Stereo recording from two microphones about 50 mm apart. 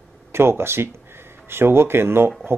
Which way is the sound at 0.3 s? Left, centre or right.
Right.